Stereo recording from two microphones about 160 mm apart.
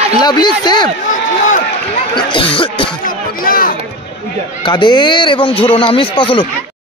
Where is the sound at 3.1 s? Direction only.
65° left (ahead or behind).